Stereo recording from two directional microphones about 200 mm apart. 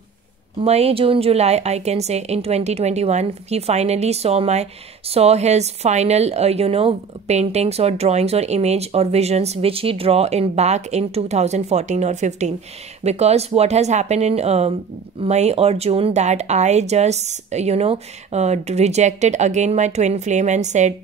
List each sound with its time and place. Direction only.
0.6 s a woman's voice: 30° right (ahead or behind)